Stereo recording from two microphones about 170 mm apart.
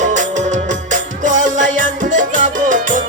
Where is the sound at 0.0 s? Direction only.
45° right (ahead or behind).